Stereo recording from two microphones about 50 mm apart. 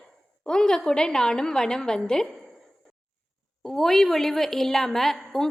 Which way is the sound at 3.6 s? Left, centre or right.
Centre.